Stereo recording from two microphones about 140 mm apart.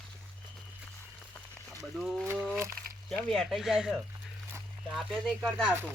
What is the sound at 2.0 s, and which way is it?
Speech, centre (ahead or behind).